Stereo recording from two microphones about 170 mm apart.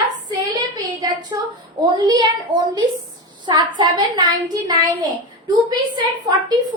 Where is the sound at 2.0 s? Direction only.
25° right (ahead or behind).